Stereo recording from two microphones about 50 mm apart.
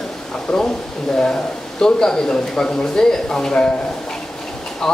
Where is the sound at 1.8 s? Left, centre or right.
Centre.